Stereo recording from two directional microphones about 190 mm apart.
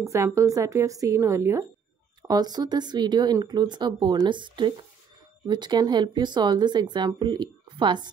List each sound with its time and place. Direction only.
0.0 s a woman's voice: 15° right (ahead or behind)